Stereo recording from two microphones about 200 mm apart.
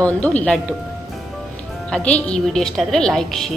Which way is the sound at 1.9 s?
5° left (ahead or behind).